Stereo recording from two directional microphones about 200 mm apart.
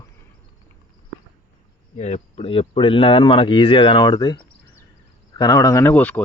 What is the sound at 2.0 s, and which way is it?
Speech, 35° left (ahead or behind).